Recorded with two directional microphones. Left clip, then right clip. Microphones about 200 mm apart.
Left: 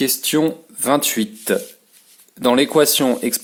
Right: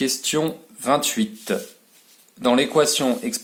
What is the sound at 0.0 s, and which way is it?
Speech, 40° left (ahead or behind).